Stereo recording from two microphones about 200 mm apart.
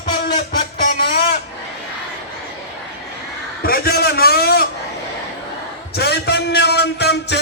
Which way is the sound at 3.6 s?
50° left (ahead or behind).